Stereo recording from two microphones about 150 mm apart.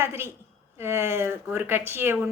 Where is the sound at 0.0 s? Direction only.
15° right (ahead or behind).